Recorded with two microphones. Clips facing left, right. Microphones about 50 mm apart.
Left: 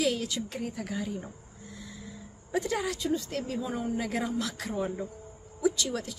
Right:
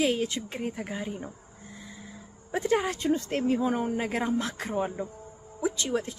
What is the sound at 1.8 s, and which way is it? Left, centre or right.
Vehicle, right.